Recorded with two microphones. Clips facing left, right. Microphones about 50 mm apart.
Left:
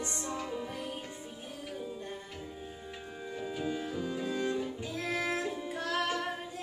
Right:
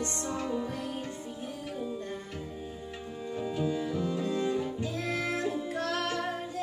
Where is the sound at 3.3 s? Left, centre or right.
Centre.